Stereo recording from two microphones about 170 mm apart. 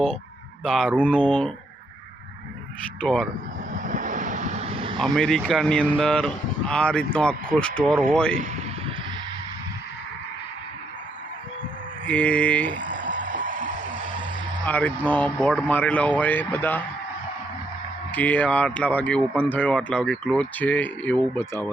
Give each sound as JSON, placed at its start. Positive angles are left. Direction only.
{"t": 0.6, "sound": "speech", "side_deg": 5}
{"t": 3.0, "sound": "speech", "side_deg": 5}
{"t": 3.7, "sound": "vehicle", "side_deg": -50}
{"t": 4.9, "sound": "speech", "side_deg": 0}
{"t": 12.0, "sound": "speech", "side_deg": 5}
{"t": 12.7, "sound": "a sound", "side_deg": -50}
{"t": 14.6, "sound": "speech", "side_deg": 10}
{"t": 18.1, "sound": "speech", "side_deg": 10}